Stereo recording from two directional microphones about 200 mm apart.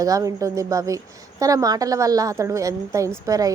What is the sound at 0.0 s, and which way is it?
A woman's voice, 15° right (ahead or behind).